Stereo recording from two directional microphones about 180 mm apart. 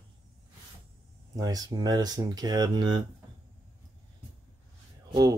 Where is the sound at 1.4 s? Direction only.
20° right (ahead or behind).